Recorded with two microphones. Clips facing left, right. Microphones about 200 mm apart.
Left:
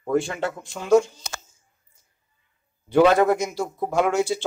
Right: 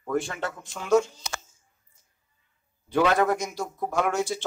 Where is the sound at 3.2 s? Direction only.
10° left (ahead or behind).